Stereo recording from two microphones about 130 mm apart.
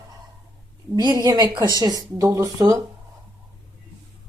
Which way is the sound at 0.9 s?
30° right (ahead or behind).